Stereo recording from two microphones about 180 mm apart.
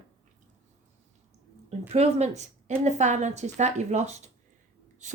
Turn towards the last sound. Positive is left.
turn(degrees=-40)  # may be behind; listen again after turning